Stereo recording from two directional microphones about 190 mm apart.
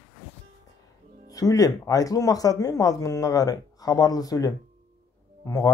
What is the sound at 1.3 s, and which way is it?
Speech, 20° left (ahead or behind).